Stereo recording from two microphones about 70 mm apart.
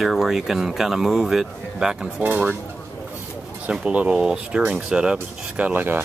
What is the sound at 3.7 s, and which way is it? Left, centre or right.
Speech, centre.